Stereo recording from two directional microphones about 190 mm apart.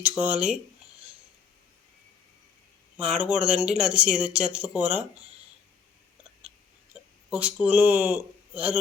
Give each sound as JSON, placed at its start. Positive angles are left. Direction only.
{"t": 0.0, "sound": "speech", "side_deg": -10}
{"t": 3.0, "sound": "speech", "side_deg": -5}
{"t": 7.3, "sound": "speech", "side_deg": -5}